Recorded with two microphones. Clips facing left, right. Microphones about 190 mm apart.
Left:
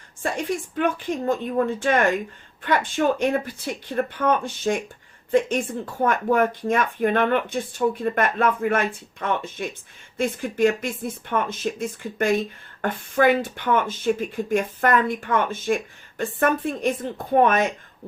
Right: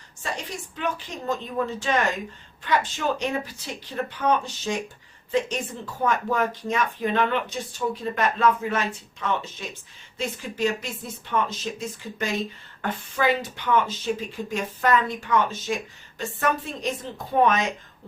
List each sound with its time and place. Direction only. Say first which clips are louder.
0.2 s speech: left 7 dB; 55° left (ahead or behind)